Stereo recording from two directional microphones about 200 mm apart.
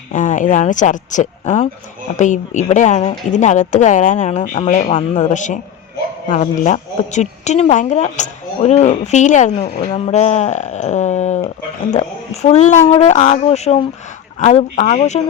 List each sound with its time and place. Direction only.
0.1 s speech: 40° left (ahead or behind)